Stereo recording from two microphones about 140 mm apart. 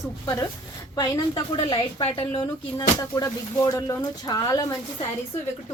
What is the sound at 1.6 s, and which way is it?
Speech, 40° left (ahead or behind).